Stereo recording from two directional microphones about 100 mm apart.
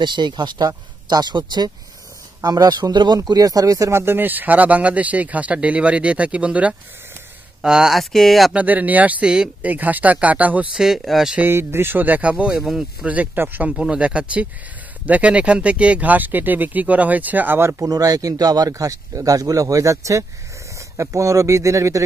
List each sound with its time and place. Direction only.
0.0 s speech: 50° right (ahead or behind); by 8.5 s centre (ahead or behind)
8.5 s speech: 15° right (ahead or behind)
11.3 s speech: 20° right (ahead or behind)